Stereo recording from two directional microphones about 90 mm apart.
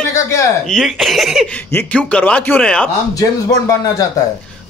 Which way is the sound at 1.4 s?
15° left (ahead or behind).